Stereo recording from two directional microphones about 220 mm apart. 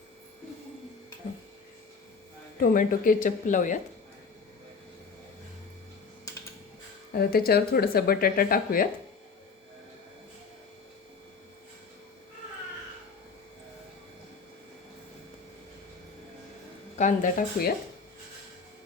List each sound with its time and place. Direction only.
2.6 s speech: 40° left (ahead or behind)
7.1 s speech: 45° left (ahead or behind)
17.0 s speech: 35° left (ahead or behind)